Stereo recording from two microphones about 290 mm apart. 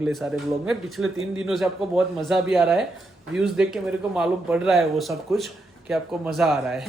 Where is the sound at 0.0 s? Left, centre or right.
Centre.